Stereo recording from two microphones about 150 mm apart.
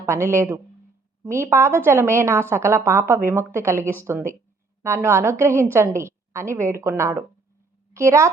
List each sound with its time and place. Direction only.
0.0 s a woman's voice: 20° right (ahead or behind)